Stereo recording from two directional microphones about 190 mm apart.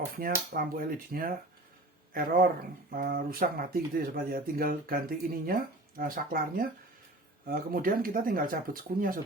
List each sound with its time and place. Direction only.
0.2 s speech: 50° right (ahead or behind)